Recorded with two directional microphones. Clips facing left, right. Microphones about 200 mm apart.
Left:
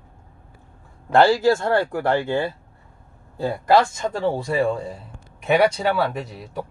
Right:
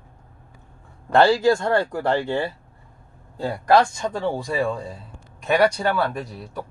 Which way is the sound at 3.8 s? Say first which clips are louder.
Left 1 dB; 5° left (ahead or behind).